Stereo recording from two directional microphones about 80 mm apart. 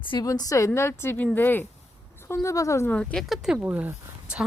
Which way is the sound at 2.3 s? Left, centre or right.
Left.